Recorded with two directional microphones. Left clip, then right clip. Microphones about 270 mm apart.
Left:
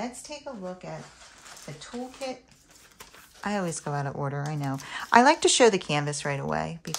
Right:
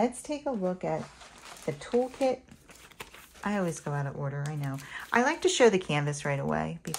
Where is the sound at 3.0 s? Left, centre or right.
Centre.